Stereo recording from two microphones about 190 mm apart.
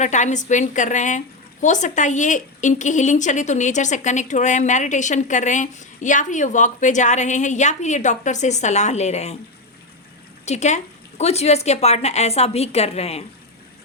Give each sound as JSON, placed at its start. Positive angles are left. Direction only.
{"t": 0.0, "sound": "a woman's voice", "side_deg": 40}
{"t": 10.4, "sound": "a woman's voice", "side_deg": 35}